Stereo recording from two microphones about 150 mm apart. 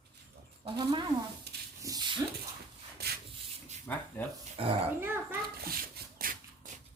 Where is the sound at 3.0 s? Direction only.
90° right.